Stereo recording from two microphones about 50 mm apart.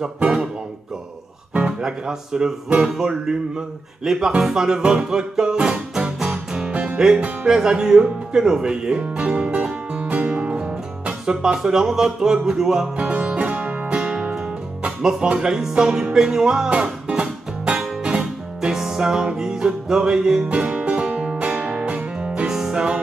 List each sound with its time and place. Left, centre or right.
0.0 s speech: right
1.5 s speech: centre
2.8 s music: centre
7.4 s music: centre
12.9 s music: right
16.7 s music: right
21.4 s music: right